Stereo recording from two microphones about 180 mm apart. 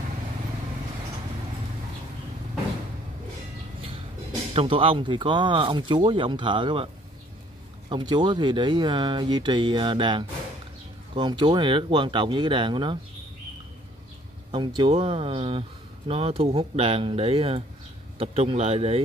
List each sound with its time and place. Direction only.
4.6 s speech: 30° right (ahead or behind)
7.9 s speech: 25° right (ahead or behind)
14.8 s speech: 35° right (ahead or behind)